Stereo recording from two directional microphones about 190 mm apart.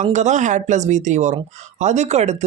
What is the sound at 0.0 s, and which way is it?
Speech, 40° right (ahead or behind).